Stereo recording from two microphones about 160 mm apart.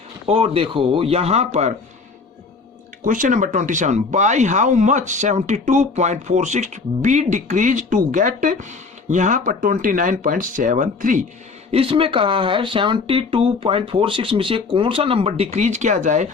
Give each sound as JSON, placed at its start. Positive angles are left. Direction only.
{"t": 0.3, "sound": "speech", "side_deg": -35}
{"t": 3.0, "sound": "speech", "side_deg": -55}
{"t": 11.7, "sound": "speech", "side_deg": -35}